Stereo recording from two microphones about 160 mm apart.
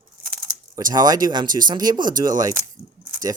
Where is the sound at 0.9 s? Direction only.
25° right (ahead or behind).